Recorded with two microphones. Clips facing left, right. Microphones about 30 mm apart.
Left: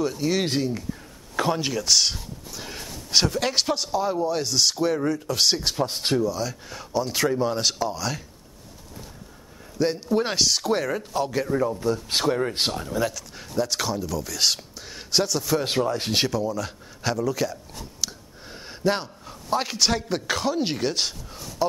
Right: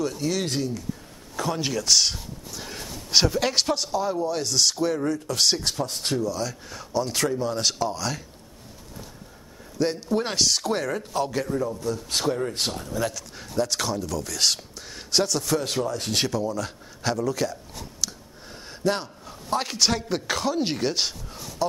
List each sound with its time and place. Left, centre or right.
0.0 s speech: centre
0.3 s speech: left
1.3 s a sound: left
1.6 s speech: centre
5.8 s speech: left
6.2 s speech: centre
9.8 s speech: centre
11.8 s speech: left
13.0 s speech: centre
15.6 s speech: left
16.3 s speech: centre
18.0 s a sound: centre